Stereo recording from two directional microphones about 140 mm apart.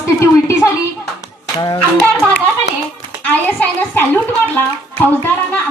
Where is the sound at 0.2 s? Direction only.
20° left (ahead or behind).